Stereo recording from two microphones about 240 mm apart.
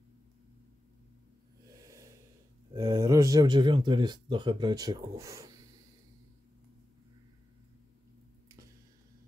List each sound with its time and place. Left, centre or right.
1.8 s snort: centre
2.7 s speech: centre